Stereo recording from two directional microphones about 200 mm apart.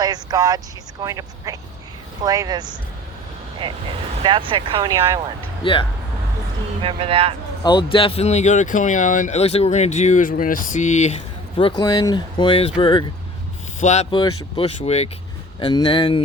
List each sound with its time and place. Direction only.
0.0 s speech: 20° right (ahead or behind)
5.6 s speech: 25° left (ahead or behind)
6.8 s speech: 30° right (ahead or behind)
7.6 s speech: 25° left (ahead or behind)
13.7 s speech: 35° left (ahead or behind)